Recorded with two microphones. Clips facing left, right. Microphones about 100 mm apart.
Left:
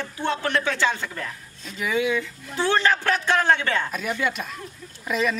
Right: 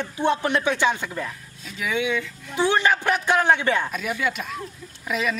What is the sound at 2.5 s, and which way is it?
Speech, 15° right (ahead or behind).